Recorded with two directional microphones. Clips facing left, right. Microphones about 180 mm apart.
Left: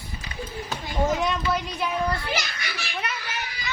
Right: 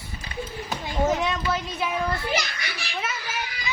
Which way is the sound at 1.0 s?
Centre (ahead or behind).